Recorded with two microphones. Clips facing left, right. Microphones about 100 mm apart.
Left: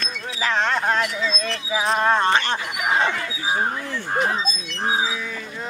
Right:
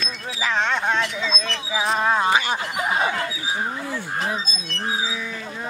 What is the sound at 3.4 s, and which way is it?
Livestock, 35° left (ahead or behind).